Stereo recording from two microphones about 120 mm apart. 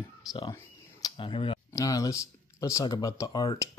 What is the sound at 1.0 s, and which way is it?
Speech, 45° left (ahead or behind).